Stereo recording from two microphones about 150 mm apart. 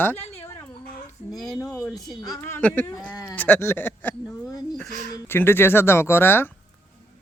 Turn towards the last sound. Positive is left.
turn(degrees=15)  # may be behind; listen again after turning